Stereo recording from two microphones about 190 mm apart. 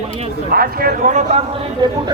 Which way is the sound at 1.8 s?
25° right (ahead or behind).